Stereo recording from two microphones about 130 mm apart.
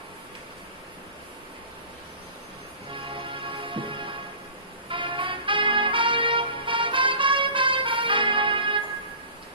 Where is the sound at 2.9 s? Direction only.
40° right (ahead or behind).